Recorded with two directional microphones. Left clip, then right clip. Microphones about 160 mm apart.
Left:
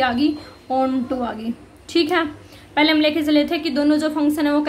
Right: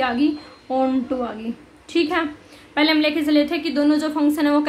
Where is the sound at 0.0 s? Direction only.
20° right (ahead or behind).